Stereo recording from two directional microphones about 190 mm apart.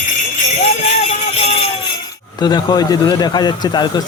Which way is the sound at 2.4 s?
20° left (ahead or behind).